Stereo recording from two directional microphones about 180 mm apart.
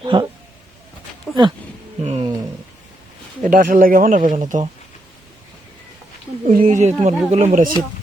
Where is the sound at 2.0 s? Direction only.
35° right (ahead or behind).